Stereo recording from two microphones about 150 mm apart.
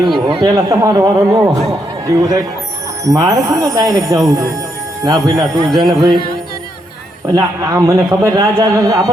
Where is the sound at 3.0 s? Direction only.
20° right (ahead or behind).